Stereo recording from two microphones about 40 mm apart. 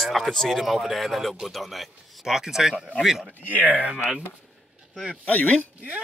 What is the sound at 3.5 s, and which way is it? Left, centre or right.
Speech, right.